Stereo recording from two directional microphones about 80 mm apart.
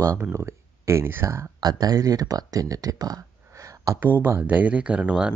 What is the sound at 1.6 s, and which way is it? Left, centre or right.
Speech, right.